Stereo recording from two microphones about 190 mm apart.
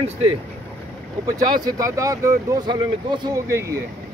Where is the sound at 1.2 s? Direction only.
20° right (ahead or behind).